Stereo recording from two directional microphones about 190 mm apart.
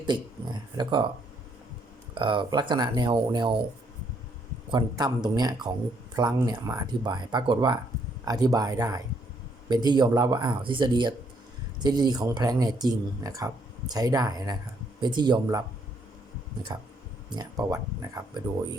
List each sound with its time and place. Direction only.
0.8 s speech: 25° right (ahead or behind)
2.1 s speech: 25° right (ahead or behind)
4.7 s speech: 20° right (ahead or behind)
17.2 s speech: 20° right (ahead or behind)